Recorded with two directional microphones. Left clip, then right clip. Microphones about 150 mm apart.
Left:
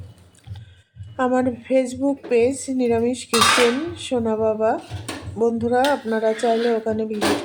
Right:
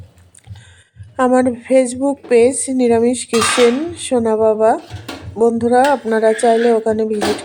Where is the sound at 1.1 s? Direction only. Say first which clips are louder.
Right 7 dB; 35° right (ahead or behind).